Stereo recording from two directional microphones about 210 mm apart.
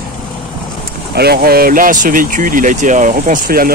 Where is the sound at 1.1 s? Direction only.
50° right (ahead or behind).